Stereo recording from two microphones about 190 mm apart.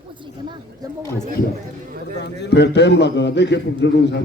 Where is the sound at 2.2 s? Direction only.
60° left (ahead or behind).